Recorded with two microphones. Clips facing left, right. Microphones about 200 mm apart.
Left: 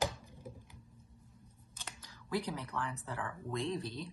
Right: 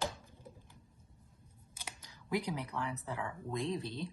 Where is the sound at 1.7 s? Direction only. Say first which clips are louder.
Right 1 dB; 15° right (ahead or behind).